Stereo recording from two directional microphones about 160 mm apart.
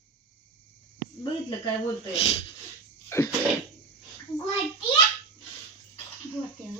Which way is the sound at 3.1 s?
15° left (ahead or behind).